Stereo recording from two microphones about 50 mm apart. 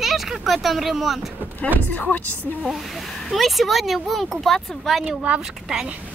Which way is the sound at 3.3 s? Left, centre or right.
Centre.